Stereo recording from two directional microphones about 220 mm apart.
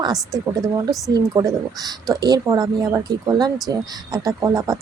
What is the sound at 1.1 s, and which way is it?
A woman's voice, 15° right (ahead or behind).